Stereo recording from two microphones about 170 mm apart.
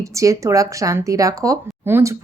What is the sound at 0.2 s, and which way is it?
A woman's voice, 20° right (ahead or behind).